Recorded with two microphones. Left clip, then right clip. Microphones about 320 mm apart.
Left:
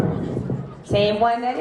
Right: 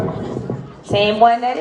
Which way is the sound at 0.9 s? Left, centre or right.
Right.